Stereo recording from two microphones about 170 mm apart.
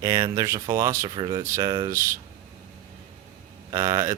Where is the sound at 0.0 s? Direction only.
20° right (ahead or behind).